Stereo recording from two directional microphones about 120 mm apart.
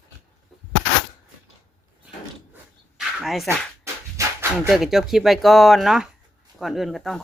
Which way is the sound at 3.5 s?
25° right (ahead or behind).